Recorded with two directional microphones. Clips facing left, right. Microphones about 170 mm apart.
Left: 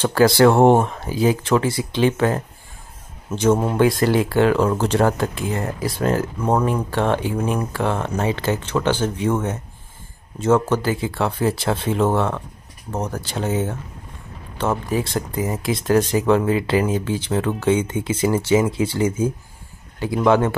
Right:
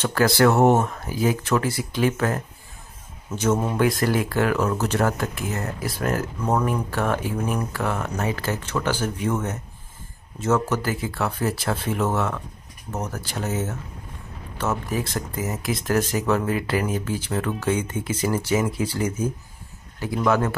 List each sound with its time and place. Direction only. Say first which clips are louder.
0.0 s speech: left 5 dB; 30° left (ahead or behind)